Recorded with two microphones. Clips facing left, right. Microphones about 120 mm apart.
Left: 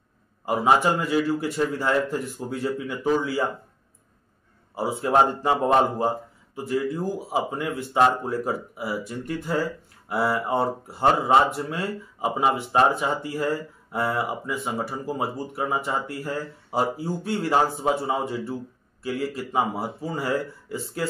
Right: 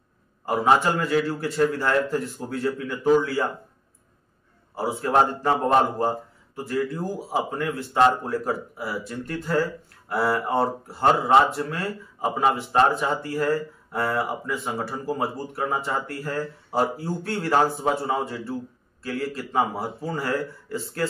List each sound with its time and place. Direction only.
0.5 s speech: 15° left (ahead or behind)
4.7 s speech: 15° left (ahead or behind)
6.5 s speech: 15° left (ahead or behind)